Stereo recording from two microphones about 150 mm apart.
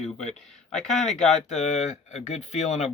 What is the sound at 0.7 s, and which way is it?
Speech, 5° left (ahead or behind).